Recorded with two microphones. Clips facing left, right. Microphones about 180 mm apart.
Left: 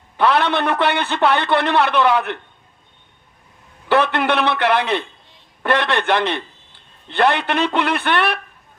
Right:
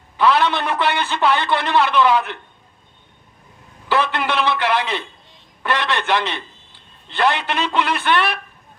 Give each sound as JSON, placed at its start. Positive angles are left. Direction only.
{"t": 0.2, "sound": "a man's voice", "side_deg": 60}
{"t": 3.8, "sound": "a man's voice", "side_deg": 60}